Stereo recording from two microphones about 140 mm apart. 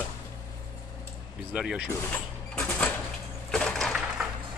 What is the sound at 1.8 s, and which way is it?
Cash register, 10° left (ahead or behind).